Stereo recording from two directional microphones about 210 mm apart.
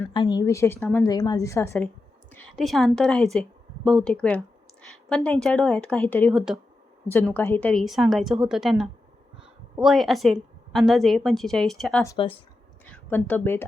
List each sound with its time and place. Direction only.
0.1 s a woman's voice: 20° left (ahead or behind)
2.3 s a woman's voice: centre (ahead or behind)
7.1 s a woman's voice: 10° left (ahead or behind)
12.0 s speech: 25° left (ahead or behind)
12.8 s speech: 10° left (ahead or behind)